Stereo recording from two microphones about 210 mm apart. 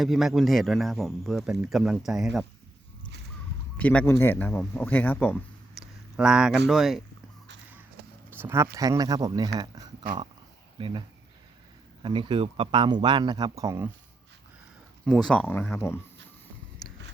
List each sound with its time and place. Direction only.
0.0 s speech: centre (ahead or behind)
3.8 s speech: 5° left (ahead or behind)
5.8 s a sound: 5° right (ahead or behind)
6.7 s speech: centre (ahead or behind)
8.4 s speech: 10° right (ahead or behind)
12.0 s speech: 25° right (ahead or behind)
15.0 s speech: 5° left (ahead or behind)